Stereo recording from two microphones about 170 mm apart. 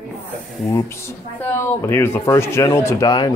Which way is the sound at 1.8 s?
15° left (ahead or behind).